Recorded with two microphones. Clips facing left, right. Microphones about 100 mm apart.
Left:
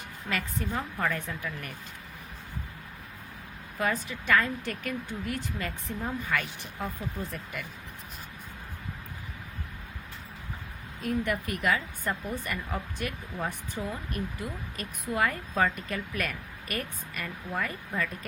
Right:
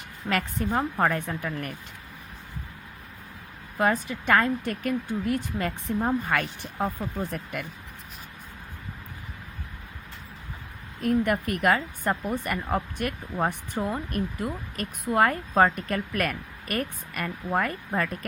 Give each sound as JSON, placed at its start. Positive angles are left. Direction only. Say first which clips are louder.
{"t": 0.3, "sound": "speech", "louder": "right 6 dB", "side_deg": -50}
{"t": 3.8, "sound": "speech", "louder": "right 5 dB", "side_deg": -45}
{"t": 11.0, "sound": "speech", "louder": "right 6 dB", "side_deg": -50}